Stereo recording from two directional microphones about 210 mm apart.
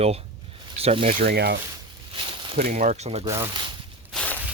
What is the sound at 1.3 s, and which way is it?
Speech, 50° right (ahead or behind).